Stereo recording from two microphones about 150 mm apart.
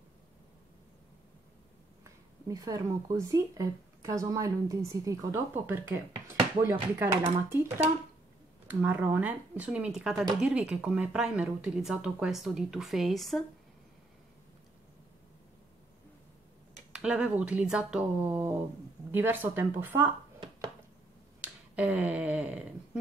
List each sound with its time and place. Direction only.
2.4 s speech: 25° right (ahead or behind)
8.6 s speech: 10° right (ahead or behind)
16.9 s speech: 5° right (ahead or behind)
21.4 s finger snapping: 10° right (ahead or behind)